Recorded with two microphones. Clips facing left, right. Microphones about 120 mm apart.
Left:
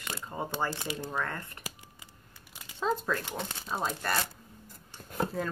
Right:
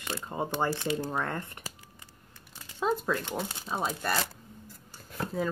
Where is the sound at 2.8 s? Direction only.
5° right (ahead or behind).